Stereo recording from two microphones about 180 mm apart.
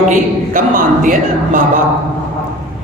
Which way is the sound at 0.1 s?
45° right (ahead or behind).